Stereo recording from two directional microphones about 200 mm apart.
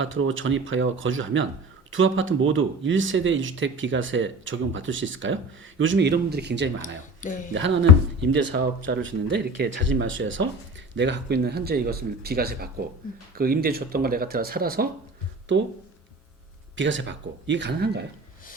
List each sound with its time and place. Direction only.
0.0 s speech: 75° right (ahead or behind)
7.2 s speech: 40° left (ahead or behind)
7.5 s speech: 65° right (ahead or behind); by 14.8 s 45° right (ahead or behind)
16.7 s speech: 65° right (ahead or behind)